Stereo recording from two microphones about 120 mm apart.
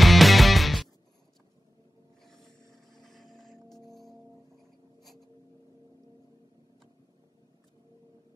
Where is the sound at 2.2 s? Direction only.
5° left (ahead or behind).